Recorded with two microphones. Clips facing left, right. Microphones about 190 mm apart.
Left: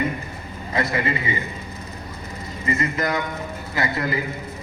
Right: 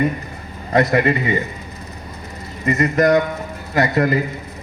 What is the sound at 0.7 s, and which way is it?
Speech, 70° right (ahead or behind).